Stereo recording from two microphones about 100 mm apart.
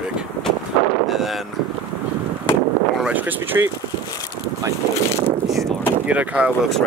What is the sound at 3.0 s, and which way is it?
Speech, 15° right (ahead or behind).